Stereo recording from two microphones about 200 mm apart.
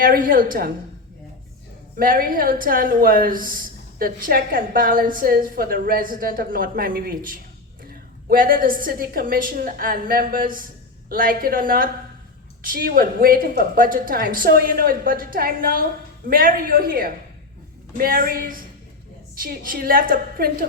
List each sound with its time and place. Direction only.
0.0 s speech: 45° right (ahead or behind)
2.0 s speech: 45° right (ahead or behind)